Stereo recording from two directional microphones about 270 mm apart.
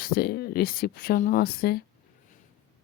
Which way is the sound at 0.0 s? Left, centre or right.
Left.